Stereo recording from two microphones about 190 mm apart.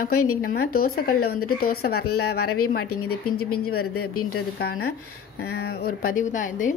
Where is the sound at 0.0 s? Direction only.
50° left (ahead or behind).